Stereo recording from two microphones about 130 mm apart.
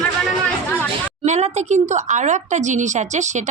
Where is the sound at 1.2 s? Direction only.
60° right (ahead or behind).